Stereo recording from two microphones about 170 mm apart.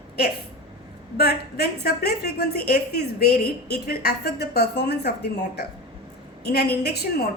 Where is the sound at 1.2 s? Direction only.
70° left (ahead or behind).